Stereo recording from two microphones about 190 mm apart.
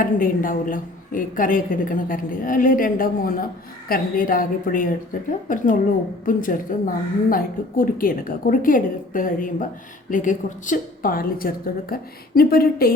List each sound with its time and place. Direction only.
0.0 s a woman's voice: 45° left (ahead or behind)